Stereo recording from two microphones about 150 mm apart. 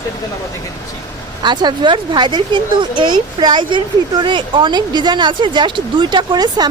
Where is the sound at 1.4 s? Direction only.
30° right (ahead or behind).